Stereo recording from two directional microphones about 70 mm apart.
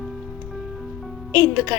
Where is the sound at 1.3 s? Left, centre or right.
Right.